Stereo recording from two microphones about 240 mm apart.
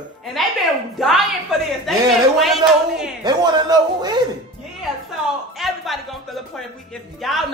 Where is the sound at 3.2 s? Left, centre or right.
Centre.